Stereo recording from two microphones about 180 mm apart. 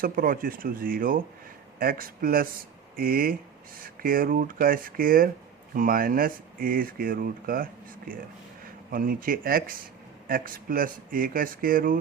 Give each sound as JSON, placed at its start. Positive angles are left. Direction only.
{"t": 0.0, "sound": "speech", "side_deg": -50}